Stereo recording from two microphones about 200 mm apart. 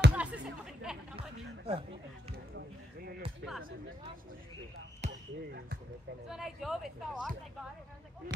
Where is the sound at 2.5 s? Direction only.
50° right (ahead or behind).